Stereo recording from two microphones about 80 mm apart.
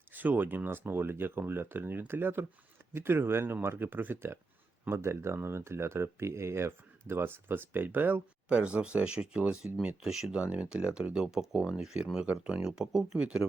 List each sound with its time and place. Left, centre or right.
0.1 s speech: right